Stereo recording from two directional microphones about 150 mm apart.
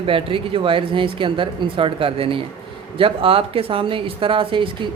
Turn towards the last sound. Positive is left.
turn(degrees=-35)  # may be behind; listen again after turning